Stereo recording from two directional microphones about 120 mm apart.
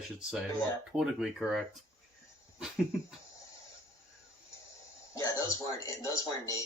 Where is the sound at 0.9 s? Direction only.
5° right (ahead or behind).